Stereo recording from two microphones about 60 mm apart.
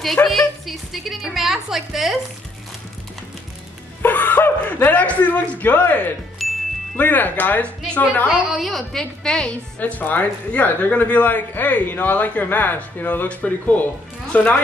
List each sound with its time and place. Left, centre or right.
0.0 s a woman's voice: centre
4.0 s a sound: left
5.0 s speech: left
6.4 s music: centre
7.0 s speech: left
8.3 s a woman's voice: centre
9.8 s speech: left